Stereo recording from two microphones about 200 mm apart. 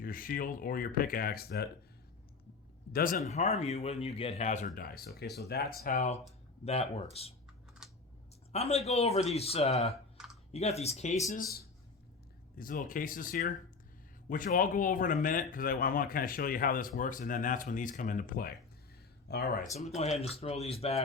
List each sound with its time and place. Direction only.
0.0 s speech: 45° left (ahead or behind)
2.9 s speech: 45° left (ahead or behind)
3.2 s speech: 35° left (ahead or behind)
7.8 s typing: centre (ahead or behind)
8.5 s speech: 30° left (ahead or behind)
12.5 s speech: 45° left (ahead or behind)
19.7 s speech: 35° left (ahead or behind)